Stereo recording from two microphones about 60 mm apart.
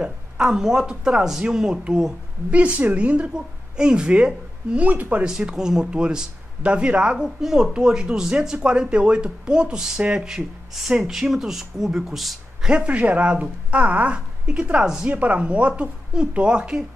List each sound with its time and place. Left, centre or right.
0.0 s speech: centre
2.6 s a woman's voice: right
4.8 s a woman's voice: right
5.2 s speech: centre
12.6 s a woman's voice: centre